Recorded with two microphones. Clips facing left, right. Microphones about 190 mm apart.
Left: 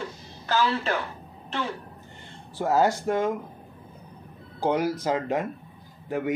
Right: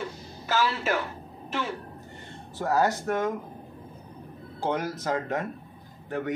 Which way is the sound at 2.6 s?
15° left (ahead or behind).